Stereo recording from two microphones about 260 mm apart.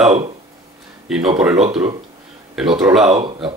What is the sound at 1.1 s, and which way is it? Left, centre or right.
Speech, centre.